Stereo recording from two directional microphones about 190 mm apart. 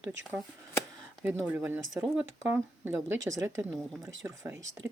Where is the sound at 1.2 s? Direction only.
10° right (ahead or behind).